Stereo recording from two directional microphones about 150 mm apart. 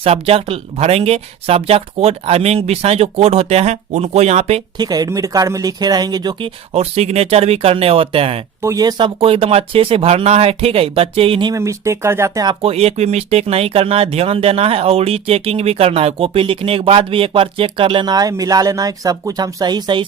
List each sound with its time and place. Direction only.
0.0 s speech: 40° right (ahead or behind)
4.8 s speech: 25° right (ahead or behind)
6.7 s speech: 45° right (ahead or behind)
8.6 s speech: 25° right (ahead or behind)
11.5 s speech: 20° right (ahead or behind)
12.6 s speech: 45° right (ahead or behind)